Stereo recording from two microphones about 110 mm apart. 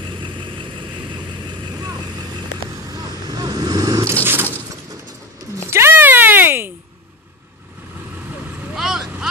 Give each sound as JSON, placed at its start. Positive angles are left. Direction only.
{"t": 1.6, "sound": "vehicle", "side_deg": -40}
{"t": 3.3, "sound": "vehicle", "side_deg": -35}
{"t": 5.7, "sound": "cat", "side_deg": -20}
{"t": 8.7, "sound": "vehicle", "side_deg": -5}